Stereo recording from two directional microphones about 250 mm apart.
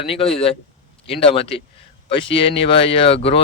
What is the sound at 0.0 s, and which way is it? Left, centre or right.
A man's voice, left.